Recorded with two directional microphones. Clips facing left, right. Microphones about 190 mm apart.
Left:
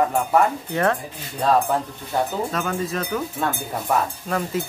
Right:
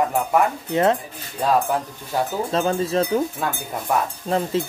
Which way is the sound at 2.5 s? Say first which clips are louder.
Right 4 dB; 30° right (ahead or behind).